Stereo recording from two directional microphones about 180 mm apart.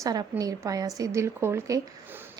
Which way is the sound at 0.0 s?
20° right (ahead or behind).